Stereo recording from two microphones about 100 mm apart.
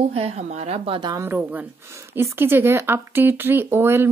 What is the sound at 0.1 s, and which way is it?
Speech, 75° right (ahead or behind).